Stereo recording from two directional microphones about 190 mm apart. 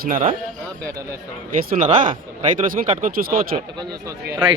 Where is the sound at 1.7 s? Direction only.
40° right (ahead or behind).